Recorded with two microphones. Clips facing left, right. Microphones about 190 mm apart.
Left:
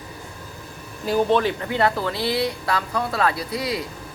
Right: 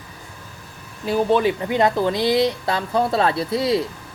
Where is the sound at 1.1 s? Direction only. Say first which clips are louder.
Right 1 dB; 10° right (ahead or behind).